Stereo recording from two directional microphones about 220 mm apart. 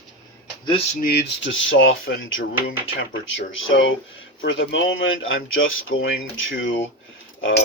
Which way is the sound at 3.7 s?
60° left (ahead or behind).